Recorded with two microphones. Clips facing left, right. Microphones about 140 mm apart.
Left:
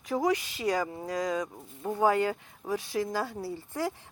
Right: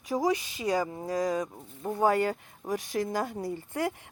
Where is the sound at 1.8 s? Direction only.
10° right (ahead or behind).